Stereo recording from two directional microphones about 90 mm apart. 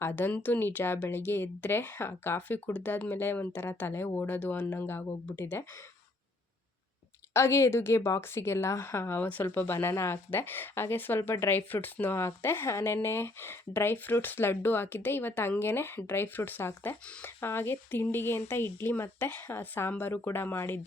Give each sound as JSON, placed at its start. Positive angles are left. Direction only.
{"t": 0.0, "sound": "speech", "side_deg": 20}
{"t": 7.3, "sound": "speech", "side_deg": 30}